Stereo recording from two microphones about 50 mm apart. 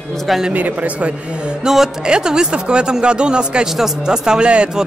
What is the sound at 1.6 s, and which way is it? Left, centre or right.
Speech, centre.